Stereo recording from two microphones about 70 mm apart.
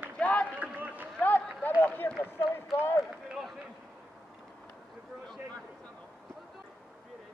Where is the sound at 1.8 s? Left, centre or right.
Left.